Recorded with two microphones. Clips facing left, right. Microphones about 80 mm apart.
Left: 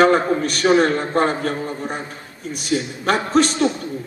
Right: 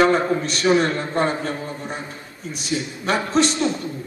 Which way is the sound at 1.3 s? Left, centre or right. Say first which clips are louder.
Left 3 dB; left.